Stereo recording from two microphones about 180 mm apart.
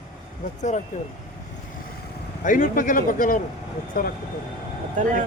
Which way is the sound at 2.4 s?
45° left (ahead or behind).